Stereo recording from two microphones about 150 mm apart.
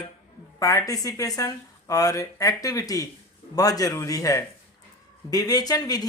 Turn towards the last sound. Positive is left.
turn(degrees=25)  # may be behind; listen again after turning